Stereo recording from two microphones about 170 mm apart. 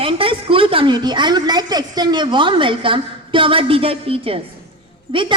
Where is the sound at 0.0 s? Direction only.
30° right (ahead or behind).